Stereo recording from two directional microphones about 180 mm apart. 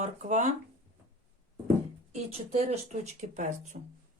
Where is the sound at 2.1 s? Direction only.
35° right (ahead or behind).